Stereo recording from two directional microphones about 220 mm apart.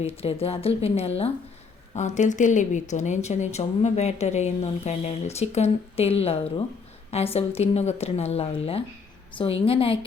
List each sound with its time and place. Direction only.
0.0 s a woman's voice: 25° left (ahead or behind)